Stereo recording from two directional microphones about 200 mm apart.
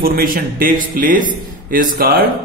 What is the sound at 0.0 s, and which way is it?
Music, 45° right (ahead or behind).